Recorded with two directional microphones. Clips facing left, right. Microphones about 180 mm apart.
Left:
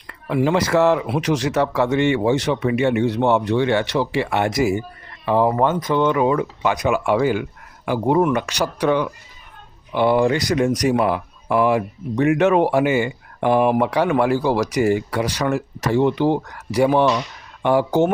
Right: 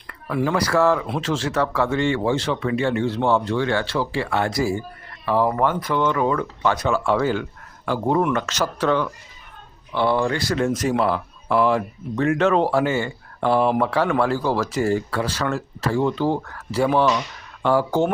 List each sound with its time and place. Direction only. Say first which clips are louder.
0.3 s speech: left 3 dB; 20° left (ahead or behind)